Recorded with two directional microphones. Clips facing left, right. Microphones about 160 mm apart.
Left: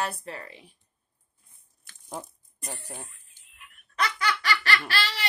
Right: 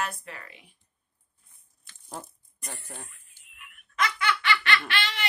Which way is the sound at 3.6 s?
35° left (ahead or behind).